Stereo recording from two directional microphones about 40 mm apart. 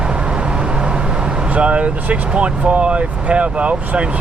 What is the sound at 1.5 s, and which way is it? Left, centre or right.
Speech, right.